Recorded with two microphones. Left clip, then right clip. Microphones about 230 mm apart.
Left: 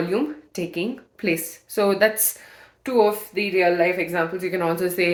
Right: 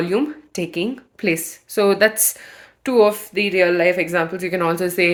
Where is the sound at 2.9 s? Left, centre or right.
Right.